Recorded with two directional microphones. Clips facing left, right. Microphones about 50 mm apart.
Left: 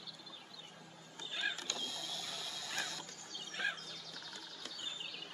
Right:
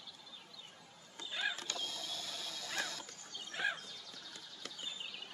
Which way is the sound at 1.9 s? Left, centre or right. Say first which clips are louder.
Even; left.